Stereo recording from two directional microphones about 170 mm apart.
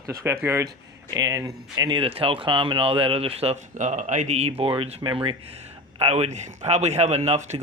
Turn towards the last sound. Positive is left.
turn(degrees=-40)  # may be behind; listen again after turning